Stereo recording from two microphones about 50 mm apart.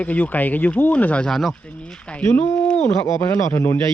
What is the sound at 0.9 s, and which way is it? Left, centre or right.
Speech, left.